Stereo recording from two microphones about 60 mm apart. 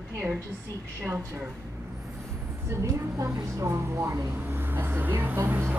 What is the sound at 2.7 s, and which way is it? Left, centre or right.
A woman's voice, right.